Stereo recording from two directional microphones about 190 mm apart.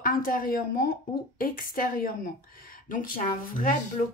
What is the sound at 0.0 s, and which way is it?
A woman's voice, 50° left (ahead or behind).